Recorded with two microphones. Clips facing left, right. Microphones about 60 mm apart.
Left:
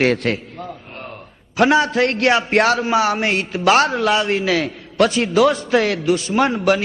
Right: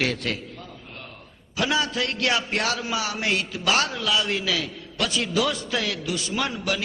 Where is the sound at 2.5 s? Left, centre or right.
Left.